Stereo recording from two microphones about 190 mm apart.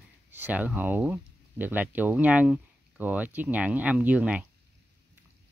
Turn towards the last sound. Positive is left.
turn(degrees=-5)  # may be behind; listen again after turning